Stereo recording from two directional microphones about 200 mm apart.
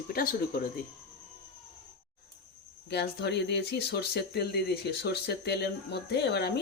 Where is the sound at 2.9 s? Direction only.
55° left (ahead or behind).